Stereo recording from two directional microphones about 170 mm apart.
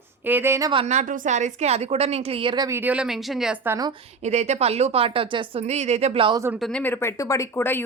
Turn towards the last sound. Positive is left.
turn(degrees=15)  # may be behind; listen again after turning